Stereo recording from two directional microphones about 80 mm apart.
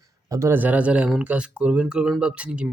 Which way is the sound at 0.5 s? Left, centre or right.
Right.